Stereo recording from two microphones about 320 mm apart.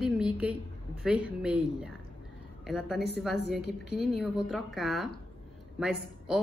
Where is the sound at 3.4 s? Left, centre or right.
Left.